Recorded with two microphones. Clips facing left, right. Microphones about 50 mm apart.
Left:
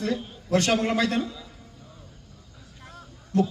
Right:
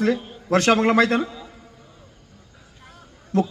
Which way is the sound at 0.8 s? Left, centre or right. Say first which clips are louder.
Right 7 dB; right.